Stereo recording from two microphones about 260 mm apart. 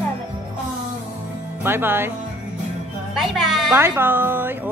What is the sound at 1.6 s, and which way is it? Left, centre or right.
Speech, centre.